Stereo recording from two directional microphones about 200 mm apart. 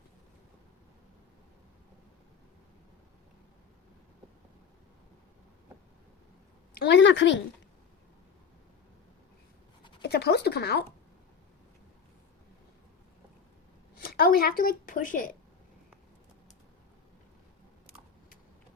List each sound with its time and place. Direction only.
6.7 s a woman's voice: 60° left (ahead or behind)
10.0 s speech: 55° left (ahead or behind)
14.0 s a woman's voice: 50° left (ahead or behind)